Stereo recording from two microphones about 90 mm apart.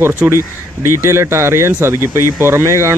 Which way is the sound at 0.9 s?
30° right (ahead or behind).